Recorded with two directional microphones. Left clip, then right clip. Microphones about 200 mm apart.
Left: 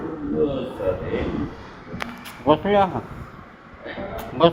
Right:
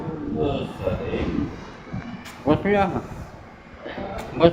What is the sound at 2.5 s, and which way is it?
Speech, 5° right (ahead or behind).